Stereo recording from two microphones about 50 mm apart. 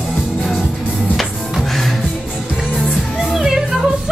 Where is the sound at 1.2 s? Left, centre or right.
Centre.